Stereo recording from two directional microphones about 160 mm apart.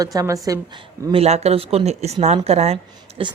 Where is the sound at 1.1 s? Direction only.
40° right (ahead or behind).